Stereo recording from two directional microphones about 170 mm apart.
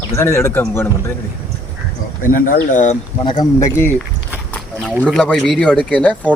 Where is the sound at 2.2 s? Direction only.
55° left (ahead or behind).